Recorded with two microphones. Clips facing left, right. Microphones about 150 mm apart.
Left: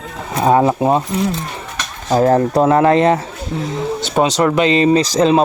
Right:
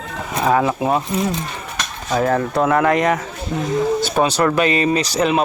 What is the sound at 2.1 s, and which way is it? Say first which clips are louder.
Speech: left 6 dB; 35° left (ahead or behind).